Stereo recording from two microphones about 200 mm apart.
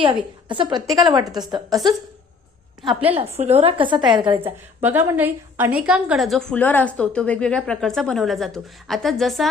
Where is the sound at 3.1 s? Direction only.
30° right (ahead or behind).